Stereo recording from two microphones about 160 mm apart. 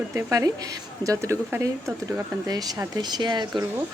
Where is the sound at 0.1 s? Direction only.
20° right (ahead or behind).